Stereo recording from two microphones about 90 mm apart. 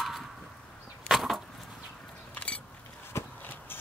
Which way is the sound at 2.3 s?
15° left (ahead or behind).